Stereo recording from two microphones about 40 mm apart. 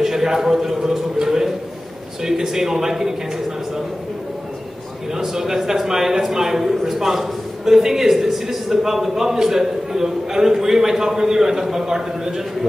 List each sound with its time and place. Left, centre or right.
0.0 s a sound: centre
2.2 s a man's voice: centre
5.1 s a man's voice: centre